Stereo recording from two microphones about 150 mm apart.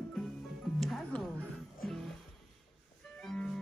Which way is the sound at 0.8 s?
Centre (ahead or behind).